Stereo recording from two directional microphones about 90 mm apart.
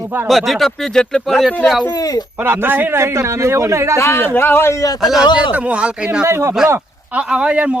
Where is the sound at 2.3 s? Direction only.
25° right (ahead or behind).